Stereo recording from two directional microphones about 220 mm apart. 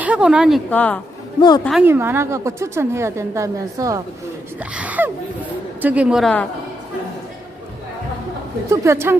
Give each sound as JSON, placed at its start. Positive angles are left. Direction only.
{"t": 0.0, "sound": "a woman's voice", "side_deg": -5}
{"t": 1.4, "sound": "a woman's voice", "side_deg": 20}
{"t": 1.8, "sound": "a woman's voice", "side_deg": -10}
{"t": 8.7, "sound": "a woman's voice", "side_deg": -15}